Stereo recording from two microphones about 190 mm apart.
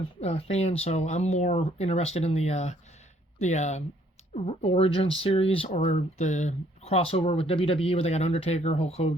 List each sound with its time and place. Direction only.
0.2 s speech: 30° left (ahead or behind)